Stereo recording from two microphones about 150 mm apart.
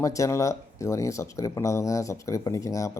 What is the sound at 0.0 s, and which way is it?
Speech, 20° left (ahead or behind).